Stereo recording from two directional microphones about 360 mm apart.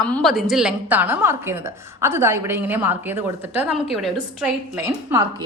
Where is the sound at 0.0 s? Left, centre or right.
Centre.